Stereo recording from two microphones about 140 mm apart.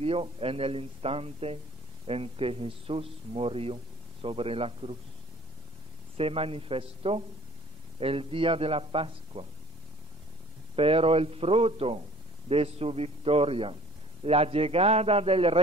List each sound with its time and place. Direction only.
0.0 s speech: 40° right (ahead or behind)
6.1 s speech: 45° right (ahead or behind)
10.8 s speech: 45° right (ahead or behind)